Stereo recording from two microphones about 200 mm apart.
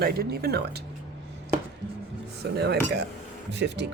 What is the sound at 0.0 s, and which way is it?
Speech, 50° right (ahead or behind).